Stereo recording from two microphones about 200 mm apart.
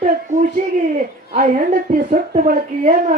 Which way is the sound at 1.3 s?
45° right (ahead or behind).